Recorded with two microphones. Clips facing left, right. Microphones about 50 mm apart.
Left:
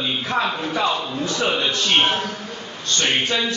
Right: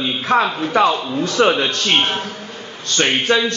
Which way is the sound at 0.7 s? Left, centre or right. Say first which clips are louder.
Right 6 dB; right.